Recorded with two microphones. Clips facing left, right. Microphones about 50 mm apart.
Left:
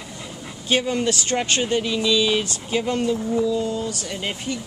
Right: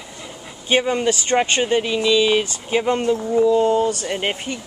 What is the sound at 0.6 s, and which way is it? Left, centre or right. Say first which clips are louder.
Speech: right 3 dB; right.